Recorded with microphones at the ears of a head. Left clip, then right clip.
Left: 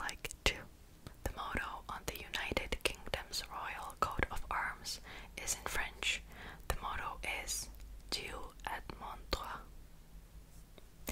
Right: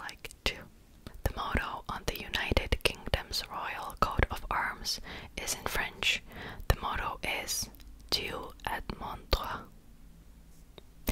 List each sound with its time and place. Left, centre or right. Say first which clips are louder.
0.0 s whispering: right 1 dB; centre
1.0 s whispering: right 7 dB; right